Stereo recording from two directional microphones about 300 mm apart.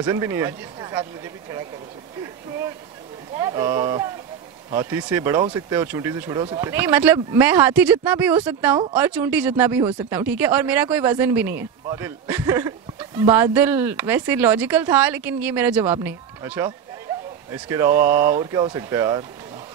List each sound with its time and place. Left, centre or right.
0.0 s speech: centre
3.3 s speech: centre